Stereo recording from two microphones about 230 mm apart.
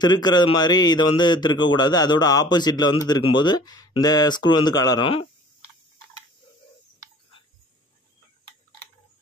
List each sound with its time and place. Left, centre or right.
0.0 s a man's voice: centre